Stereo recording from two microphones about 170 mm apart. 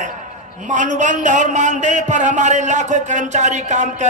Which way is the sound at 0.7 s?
45° right (ahead or behind).